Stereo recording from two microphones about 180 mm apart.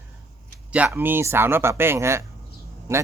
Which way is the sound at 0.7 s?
10° right (ahead or behind).